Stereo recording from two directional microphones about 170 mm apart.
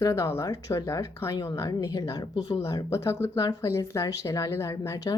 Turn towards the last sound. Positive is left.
turn(degrees=20)  # may be behind; listen again after turning